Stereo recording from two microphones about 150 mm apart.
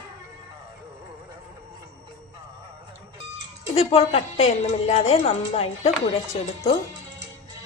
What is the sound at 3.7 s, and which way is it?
Speech, 45° left (ahead or behind).